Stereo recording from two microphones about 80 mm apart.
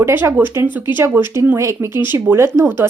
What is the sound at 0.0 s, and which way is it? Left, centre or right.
A woman's voice, right.